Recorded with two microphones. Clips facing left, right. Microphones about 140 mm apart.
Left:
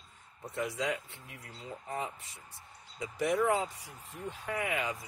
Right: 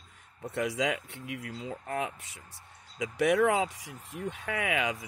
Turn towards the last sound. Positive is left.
turn(degrees=-85)